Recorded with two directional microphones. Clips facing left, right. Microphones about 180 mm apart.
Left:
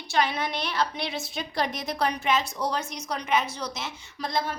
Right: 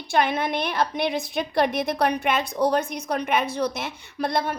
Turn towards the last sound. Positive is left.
turn(degrees=-60)  # may be behind; listen again after turning